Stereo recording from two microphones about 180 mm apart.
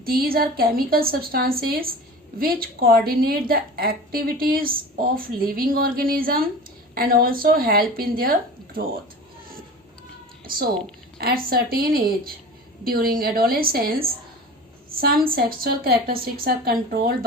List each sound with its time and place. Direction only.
0.0 s a woman's voice: 55° right (ahead or behind)
11.2 s a woman's voice: 55° right (ahead or behind)